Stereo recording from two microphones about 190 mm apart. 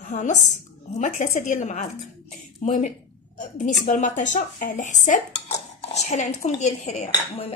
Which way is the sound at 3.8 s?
40° left (ahead or behind).